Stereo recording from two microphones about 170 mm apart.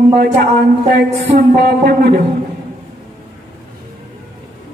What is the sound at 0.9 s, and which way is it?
Speech, 75° right (ahead or behind).